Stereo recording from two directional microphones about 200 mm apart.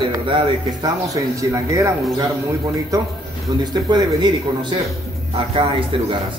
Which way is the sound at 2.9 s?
15° right (ahead or behind).